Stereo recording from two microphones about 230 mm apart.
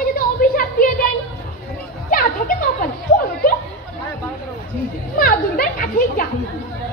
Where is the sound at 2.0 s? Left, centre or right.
Left.